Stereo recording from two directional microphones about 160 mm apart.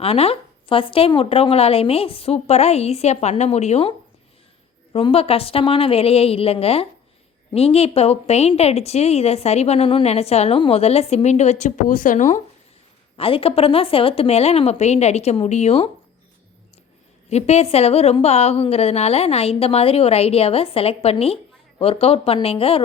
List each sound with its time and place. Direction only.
0.0 s a woman's voice: 40° left (ahead or behind)
13.1 s a woman's voice: 35° left (ahead or behind)
17.2 s a woman's voice: 40° left (ahead or behind)